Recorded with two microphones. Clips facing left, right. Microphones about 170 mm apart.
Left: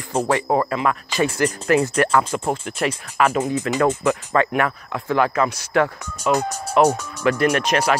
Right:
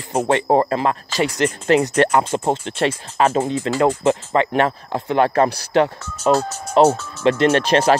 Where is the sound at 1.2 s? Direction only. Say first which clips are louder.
Right 1 dB; 25° right (ahead or behind).